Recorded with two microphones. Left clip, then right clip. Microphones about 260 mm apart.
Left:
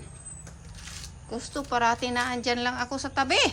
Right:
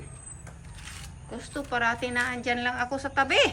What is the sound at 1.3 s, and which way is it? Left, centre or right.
A woman's voice, centre.